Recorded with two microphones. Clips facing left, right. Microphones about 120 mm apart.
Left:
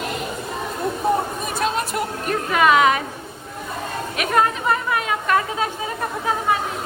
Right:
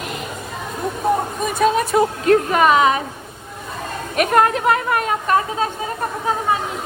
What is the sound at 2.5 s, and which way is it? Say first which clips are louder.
Speech: right 2 dB; 40° right (ahead or behind).